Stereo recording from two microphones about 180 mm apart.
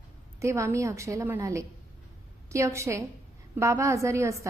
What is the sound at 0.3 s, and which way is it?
A woman's voice, 15° right (ahead or behind).